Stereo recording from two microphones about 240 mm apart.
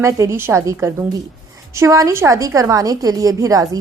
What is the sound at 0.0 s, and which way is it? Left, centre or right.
A woman's voice, centre.